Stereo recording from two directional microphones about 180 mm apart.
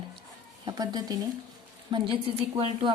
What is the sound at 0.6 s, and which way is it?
A woman's voice, 20° right (ahead or behind).